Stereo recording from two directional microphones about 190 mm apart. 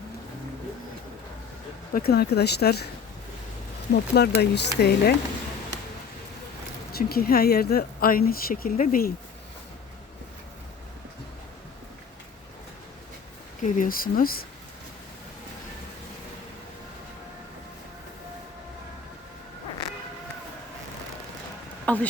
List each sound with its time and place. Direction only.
1.9 s speech: 55° left (ahead or behind)
4.1 s speech: 60° left (ahead or behind)
6.9 s speech: 55° left (ahead or behind)
13.6 s speech: 45° left (ahead or behind)
21.9 s speech: 5° left (ahead or behind)